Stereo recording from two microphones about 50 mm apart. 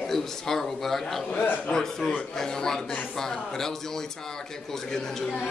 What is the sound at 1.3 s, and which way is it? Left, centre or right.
Speech, left.